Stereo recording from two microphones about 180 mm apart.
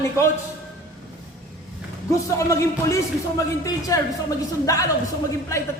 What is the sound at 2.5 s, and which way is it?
A man's voice, 15° left (ahead or behind).